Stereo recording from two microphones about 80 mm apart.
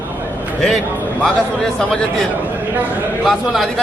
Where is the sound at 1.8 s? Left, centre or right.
Centre.